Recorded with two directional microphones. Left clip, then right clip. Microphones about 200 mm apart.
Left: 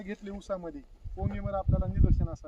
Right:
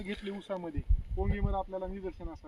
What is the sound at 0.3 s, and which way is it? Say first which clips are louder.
Speech: left 6 dB; 20° left (ahead or behind).